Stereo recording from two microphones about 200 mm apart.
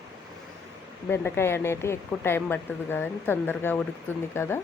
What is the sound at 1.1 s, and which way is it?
Speech, 10° left (ahead or behind).